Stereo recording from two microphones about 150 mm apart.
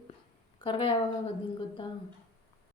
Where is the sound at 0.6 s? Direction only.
35° left (ahead or behind).